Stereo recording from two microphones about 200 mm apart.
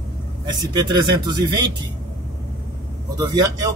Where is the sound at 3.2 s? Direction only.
20° right (ahead or behind).